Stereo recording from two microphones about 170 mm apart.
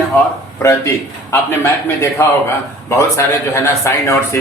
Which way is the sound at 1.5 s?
15° left (ahead or behind).